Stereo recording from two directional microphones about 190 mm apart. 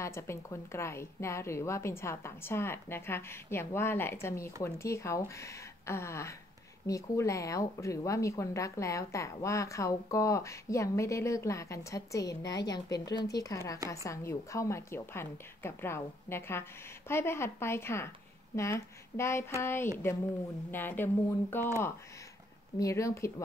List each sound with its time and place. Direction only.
0.0 s a woman's voice: 15° left (ahead or behind)
22.8 s a woman's voice: 15° left (ahead or behind)